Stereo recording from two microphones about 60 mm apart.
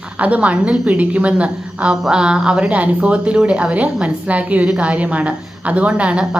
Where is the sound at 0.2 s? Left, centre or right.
Right.